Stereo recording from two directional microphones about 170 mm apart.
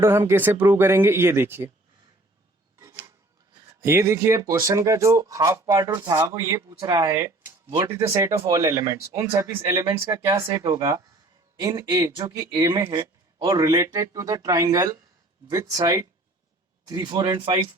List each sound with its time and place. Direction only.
0.0 s speech: 15° right (ahead or behind)
2.7 s a sound: 15° right (ahead or behind)
3.8 s a man's voice: 15° right (ahead or behind)